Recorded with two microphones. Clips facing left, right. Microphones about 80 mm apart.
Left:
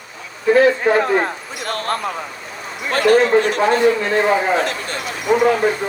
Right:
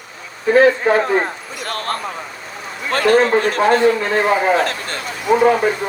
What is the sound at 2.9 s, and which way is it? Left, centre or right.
A man's voice, right.